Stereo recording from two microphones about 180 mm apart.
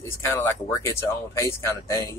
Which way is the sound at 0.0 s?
15° left (ahead or behind).